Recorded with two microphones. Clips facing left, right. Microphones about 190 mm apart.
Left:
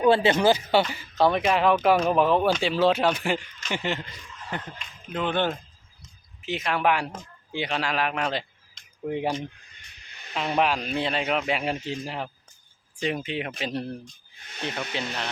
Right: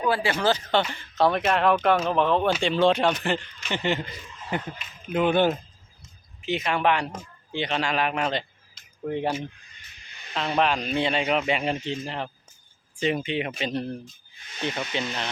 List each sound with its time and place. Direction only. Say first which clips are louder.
0.0 s speech: left 5 dB; 25° left (ahead or behind)
0.4 s speech: left 3 dB; 10° left (ahead or behind); by 5.5 s 10° right (ahead or behind)
6.0 s a sound: left 1 dB; centre (ahead or behind)
7.5 s speech: right 1 dB; 5° left (ahead or behind)
10.3 s speech: even; 10° left (ahead or behind)